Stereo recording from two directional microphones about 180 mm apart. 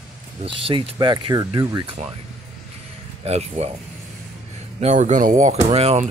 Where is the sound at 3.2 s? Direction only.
35° right (ahead or behind).